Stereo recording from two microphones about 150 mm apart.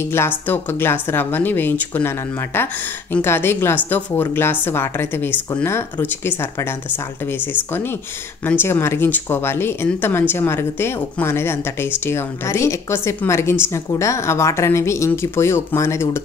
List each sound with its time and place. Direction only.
0.0 s speech: 15° left (ahead or behind)
8.5 s speech: 15° left (ahead or behind)